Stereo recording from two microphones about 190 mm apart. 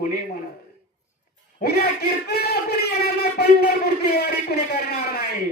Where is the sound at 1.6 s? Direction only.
55° left (ahead or behind).